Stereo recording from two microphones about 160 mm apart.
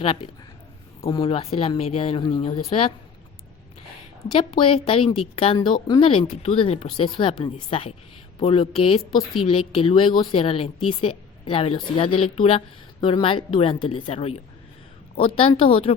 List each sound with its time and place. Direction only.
1.0 s a woman's voice: 25° left (ahead or behind)
4.3 s a woman's voice: 35° left (ahead or behind)